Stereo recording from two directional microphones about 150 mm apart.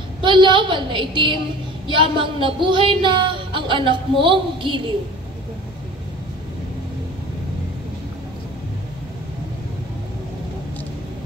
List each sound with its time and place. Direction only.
0.2 s speech: 30° right (ahead or behind)